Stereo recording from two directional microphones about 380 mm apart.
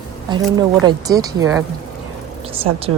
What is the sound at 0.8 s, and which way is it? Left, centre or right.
Speech, centre.